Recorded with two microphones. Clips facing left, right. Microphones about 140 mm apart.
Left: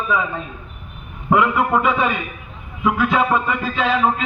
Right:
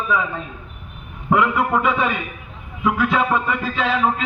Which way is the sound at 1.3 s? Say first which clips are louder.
Left 1 dB; 15° left (ahead or behind).